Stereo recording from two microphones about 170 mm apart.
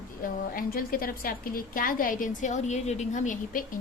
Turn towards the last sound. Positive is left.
turn(degrees=50)  # may be behind; listen again after turning